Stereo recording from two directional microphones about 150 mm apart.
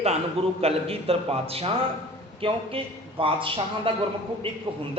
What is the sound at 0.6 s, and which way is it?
A man's voice, 40° right (ahead or behind).